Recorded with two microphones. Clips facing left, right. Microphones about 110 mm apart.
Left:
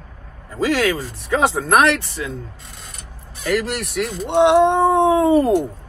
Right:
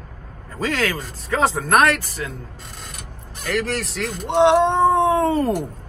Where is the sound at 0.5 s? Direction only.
20° left (ahead or behind).